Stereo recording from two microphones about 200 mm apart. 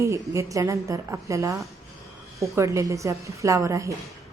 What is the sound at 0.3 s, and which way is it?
A woman's voice, 15° right (ahead or behind).